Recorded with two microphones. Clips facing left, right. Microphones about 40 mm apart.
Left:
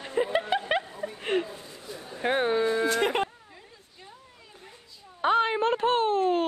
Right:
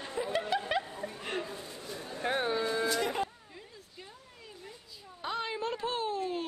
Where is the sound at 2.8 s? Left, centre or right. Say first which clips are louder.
Left 6 dB; left.